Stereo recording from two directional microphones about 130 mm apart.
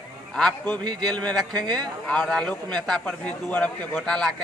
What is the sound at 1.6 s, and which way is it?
Speech, 30° right (ahead or behind).